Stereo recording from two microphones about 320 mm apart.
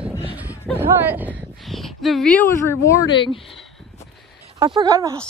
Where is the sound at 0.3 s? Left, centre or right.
Centre.